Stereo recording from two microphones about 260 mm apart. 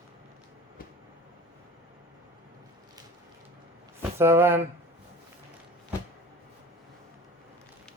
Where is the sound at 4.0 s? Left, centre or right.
Centre.